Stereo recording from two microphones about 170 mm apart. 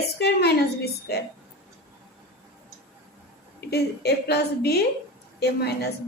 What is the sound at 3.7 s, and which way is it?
A woman's voice, 70° left (ahead or behind).